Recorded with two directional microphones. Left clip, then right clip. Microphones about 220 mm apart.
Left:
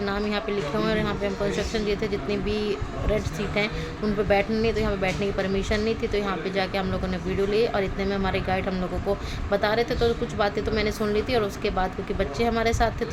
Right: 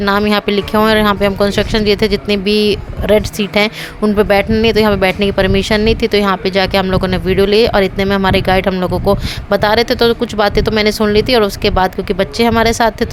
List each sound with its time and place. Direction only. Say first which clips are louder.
0.0 s speech: right 14 dB; 45° right (ahead or behind)